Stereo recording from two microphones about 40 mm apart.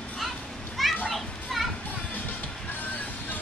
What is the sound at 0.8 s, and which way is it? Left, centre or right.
Children playing, centre.